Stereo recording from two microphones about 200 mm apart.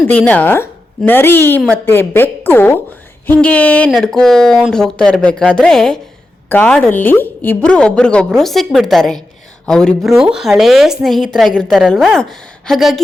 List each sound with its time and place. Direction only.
0.1 s a woman's voice: 5° left (ahead or behind)